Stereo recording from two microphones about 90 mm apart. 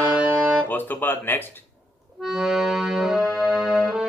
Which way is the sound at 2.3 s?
Centre (ahead or behind).